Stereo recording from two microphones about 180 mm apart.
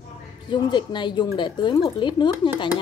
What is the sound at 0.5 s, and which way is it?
Speech, 25° left (ahead or behind).